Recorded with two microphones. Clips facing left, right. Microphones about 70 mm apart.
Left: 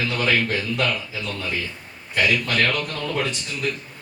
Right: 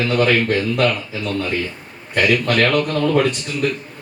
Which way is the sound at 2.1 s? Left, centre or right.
Right.